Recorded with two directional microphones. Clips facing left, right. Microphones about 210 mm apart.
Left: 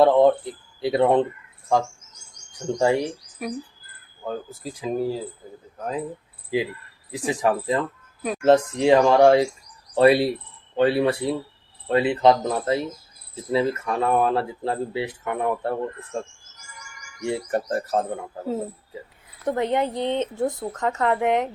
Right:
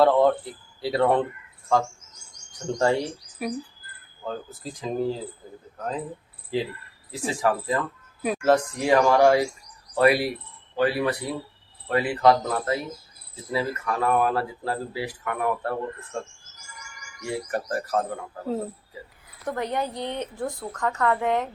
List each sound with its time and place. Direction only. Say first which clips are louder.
0.0 s speech: left 3 dB; 20° left (ahead or behind)
2.7 s speech: left 2 dB; 15° left (ahead or behind)
3.4 s speech: right 1 dB; 5° right (ahead or behind)
4.2 s speech: left 2 dB; 10° left (ahead or behind)
17.2 s speech: left 4 dB; 25° left (ahead or behind)
19.5 s speech: left 5 dB; 25° left (ahead or behind)